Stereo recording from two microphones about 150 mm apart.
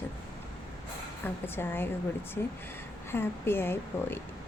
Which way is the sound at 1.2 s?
15° left (ahead or behind).